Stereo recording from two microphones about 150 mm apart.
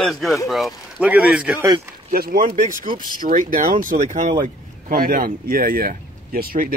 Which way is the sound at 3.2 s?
65° right (ahead or behind).